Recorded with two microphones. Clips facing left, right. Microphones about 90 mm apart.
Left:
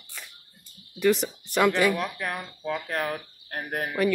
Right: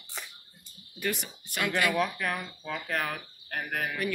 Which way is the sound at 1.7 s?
20° left (ahead or behind).